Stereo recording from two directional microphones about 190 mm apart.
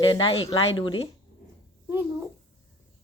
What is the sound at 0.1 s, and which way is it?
Speech, 30° left (ahead or behind).